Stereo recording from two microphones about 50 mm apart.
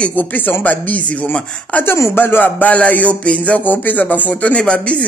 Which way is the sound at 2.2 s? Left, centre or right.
Left.